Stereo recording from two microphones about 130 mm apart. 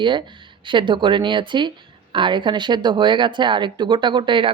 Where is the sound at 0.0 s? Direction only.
35° right (ahead or behind).